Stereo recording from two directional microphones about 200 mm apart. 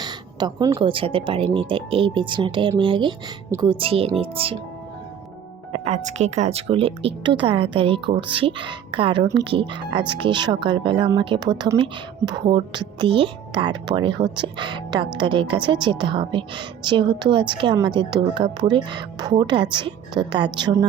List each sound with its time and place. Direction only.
0.0 s speech: 20° right (ahead or behind)
5.7 s speech: 35° right (ahead or behind)